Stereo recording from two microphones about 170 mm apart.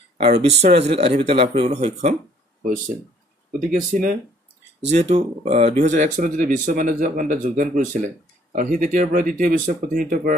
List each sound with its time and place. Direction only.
0.2 s a man's voice: 40° right (ahead or behind)
3.5 s speech: 45° right (ahead or behind)